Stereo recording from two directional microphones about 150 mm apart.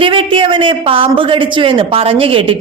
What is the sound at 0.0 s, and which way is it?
A woman's voice, 35° right (ahead or behind).